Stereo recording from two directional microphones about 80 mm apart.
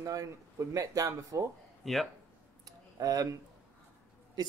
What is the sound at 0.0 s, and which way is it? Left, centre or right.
Speech, right.